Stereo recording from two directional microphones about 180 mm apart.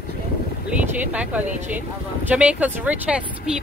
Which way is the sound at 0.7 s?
10° right (ahead or behind).